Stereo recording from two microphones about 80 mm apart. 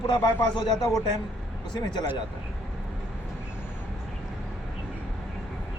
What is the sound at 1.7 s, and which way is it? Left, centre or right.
Speech, left.